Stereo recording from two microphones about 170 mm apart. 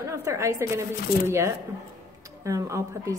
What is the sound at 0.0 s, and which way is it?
A woman's voice, 15° right (ahead or behind).